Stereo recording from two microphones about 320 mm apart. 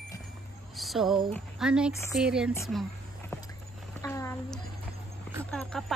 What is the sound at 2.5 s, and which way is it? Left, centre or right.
Speech, centre.